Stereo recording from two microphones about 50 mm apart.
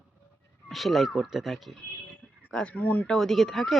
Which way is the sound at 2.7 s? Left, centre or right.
Left.